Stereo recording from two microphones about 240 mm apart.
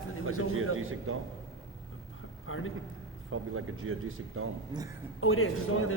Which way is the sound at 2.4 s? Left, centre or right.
Left.